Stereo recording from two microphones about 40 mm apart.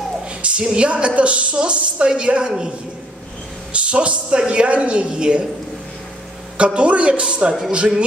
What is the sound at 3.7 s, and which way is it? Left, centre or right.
A man's voice, right.